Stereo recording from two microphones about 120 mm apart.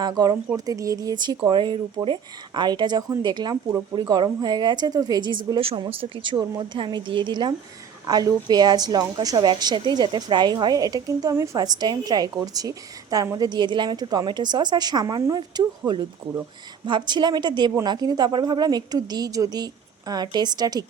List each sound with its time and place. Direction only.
0.0 s a woman's voice: 35° right (ahead or behind)
6.3 s speech: 30° right (ahead or behind)
6.7 s a woman's voice: 40° right (ahead or behind)
16.8 s a woman's voice: 40° right (ahead or behind)